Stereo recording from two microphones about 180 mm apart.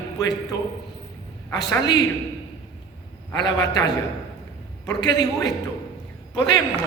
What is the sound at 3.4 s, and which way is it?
A man's voice, 20° left (ahead or behind).